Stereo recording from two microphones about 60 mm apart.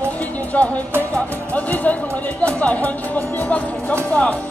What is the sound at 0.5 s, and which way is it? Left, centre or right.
Music, left.